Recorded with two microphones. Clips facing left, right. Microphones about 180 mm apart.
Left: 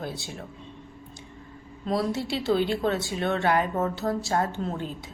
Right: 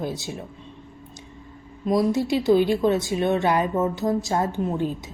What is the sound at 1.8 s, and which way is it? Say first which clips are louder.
A woman's voice: right 6 dB; 15° right (ahead or behind).